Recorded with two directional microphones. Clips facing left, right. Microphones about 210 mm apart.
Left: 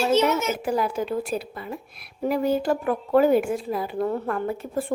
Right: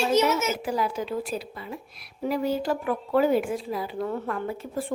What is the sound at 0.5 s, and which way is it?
Speech, 50° left (ahead or behind).